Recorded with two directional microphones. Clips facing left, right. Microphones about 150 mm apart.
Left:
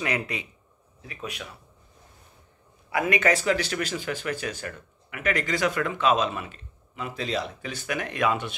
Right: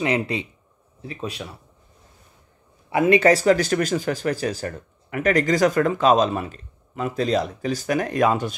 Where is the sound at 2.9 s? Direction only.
30° right (ahead or behind).